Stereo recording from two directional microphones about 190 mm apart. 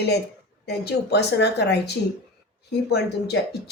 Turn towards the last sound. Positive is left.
turn(degrees=60)  # may be behind; listen again after turning